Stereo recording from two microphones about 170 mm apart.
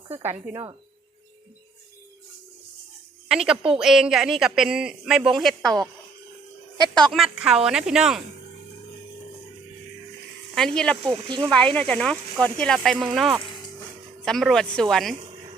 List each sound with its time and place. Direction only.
3.2 s a man's voice: 5° right (ahead or behind)
6.9 s a man's voice: centre (ahead or behind)
10.5 s a man's voice: 5° left (ahead or behind)
11.1 s speech: 30° right (ahead or behind)
11.4 s a man's voice: 5° left (ahead or behind)
13.4 s a sound: 25° left (ahead or behind)
14.2 s a man's voice: centre (ahead or behind)